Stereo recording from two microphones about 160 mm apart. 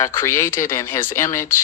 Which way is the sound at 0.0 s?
15° left (ahead or behind).